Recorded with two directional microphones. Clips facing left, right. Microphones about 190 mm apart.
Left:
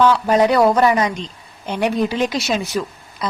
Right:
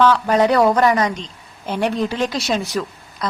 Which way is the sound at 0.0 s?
10° left (ahead or behind).